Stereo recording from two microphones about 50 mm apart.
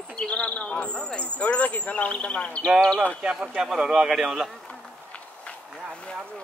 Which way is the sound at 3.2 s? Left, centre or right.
Centre.